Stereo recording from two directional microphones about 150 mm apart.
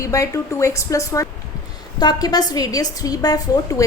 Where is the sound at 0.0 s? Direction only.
20° left (ahead or behind).